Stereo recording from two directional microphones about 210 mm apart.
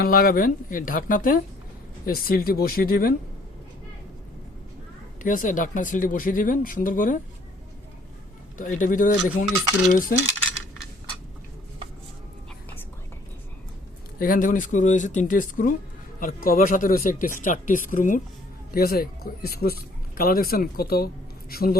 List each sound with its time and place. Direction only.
0.0 s speech: 45° left (ahead or behind)
5.2 s speech: 40° left (ahead or behind)
8.5 s speech: 40° left (ahead or behind)
14.2 s speech: 40° left (ahead or behind)